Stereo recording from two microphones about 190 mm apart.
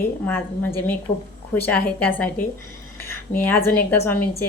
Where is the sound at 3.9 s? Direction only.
10° left (ahead or behind).